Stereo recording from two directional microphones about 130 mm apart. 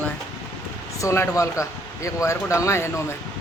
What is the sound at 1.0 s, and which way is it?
A man's voice, 20° left (ahead or behind).